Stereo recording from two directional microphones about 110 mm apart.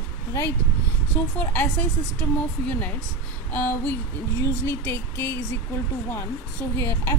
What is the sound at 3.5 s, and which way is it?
A woman's voice, 15° left (ahead or behind).